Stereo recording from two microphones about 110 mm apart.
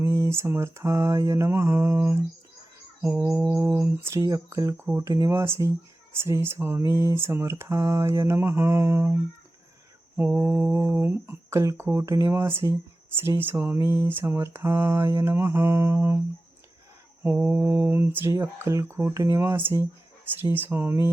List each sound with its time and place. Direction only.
0.0 s speech: 25° right (ahead or behind)
3.5 s speech: 25° right (ahead or behind)
10.2 s speech: 15° right (ahead or behind)
17.2 s speech: 15° right (ahead or behind)
19.1 s speech: 30° right (ahead or behind)